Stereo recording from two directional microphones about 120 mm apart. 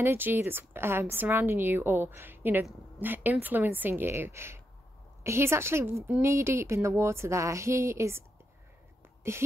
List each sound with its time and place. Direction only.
0.0 s a woman's voice: 20° right (ahead or behind)
9.3 s a woman's voice: 20° right (ahead or behind)